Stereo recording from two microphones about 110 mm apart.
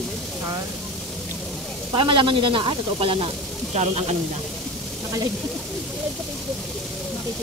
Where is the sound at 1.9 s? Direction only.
50° right (ahead or behind).